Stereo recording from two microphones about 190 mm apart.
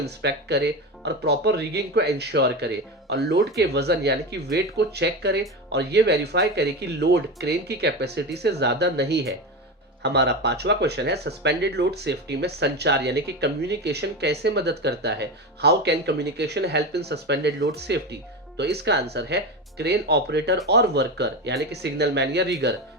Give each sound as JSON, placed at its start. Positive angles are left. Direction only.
{"t": 0.0, "sound": "speech", "side_deg": -60}